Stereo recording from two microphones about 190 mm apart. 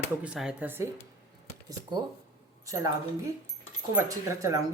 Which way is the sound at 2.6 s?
15° right (ahead or behind).